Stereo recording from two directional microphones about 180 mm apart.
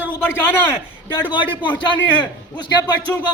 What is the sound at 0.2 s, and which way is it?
Speech, 10° left (ahead or behind).